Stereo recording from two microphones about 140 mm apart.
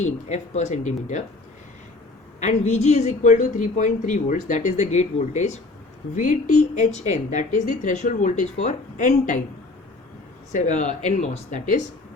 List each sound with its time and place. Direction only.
0.0 s a woman's voice: 55° left (ahead or behind)
2.5 s a woman's voice: 50° left (ahead or behind)
10.5 s a woman's voice: 60° left (ahead or behind)